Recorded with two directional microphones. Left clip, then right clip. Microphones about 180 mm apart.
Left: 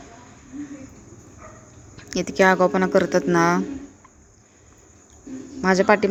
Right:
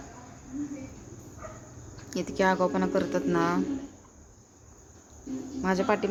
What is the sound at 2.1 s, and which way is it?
Speech, 25° left (ahead or behind).